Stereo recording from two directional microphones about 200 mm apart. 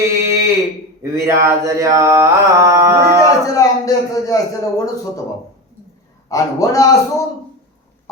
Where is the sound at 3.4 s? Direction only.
15° left (ahead or behind).